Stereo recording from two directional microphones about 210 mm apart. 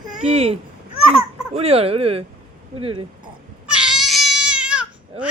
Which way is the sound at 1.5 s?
30° right (ahead or behind).